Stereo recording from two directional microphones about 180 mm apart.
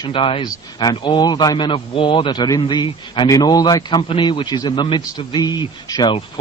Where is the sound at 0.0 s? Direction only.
30° left (ahead or behind).